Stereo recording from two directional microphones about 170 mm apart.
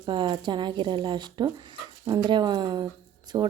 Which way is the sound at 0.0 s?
25° right (ahead or behind).